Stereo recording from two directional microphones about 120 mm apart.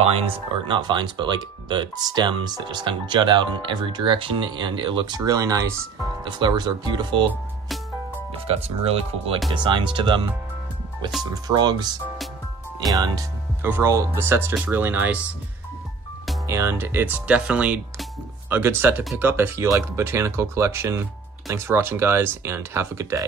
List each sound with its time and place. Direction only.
0.0 s speech: 55° right (ahead or behind); by 7.2 s 40° right (ahead or behind)
8.5 s speech: 55° right (ahead or behind)
9.5 s speech: 40° right (ahead or behind)
11.4 s speech: 35° right (ahead or behind)
13.6 s speech: 20° right (ahead or behind)
16.4 s speech: 20° right (ahead or behind)